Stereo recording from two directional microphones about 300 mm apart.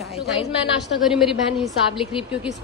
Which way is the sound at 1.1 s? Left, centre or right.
Centre.